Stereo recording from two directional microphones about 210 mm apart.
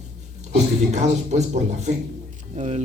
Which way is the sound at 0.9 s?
35° right (ahead or behind).